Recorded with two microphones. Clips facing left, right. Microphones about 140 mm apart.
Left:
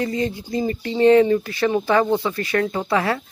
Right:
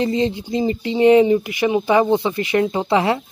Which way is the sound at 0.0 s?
20° right (ahead or behind).